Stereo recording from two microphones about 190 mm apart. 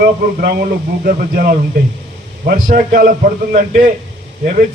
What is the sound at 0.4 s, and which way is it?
A man's voice, 50° right (ahead or behind).